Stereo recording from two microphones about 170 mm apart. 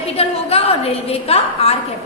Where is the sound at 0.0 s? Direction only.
35° left (ahead or behind).